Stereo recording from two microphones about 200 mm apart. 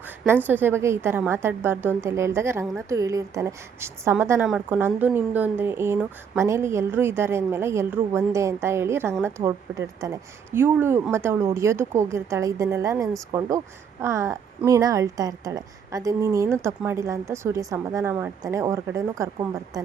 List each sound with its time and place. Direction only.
0.4 s a woman's voice: 10° right (ahead or behind)